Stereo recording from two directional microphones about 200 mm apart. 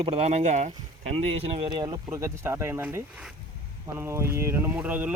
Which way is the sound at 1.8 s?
15° right (ahead or behind).